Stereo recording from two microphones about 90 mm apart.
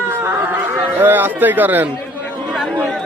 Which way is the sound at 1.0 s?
20° right (ahead or behind).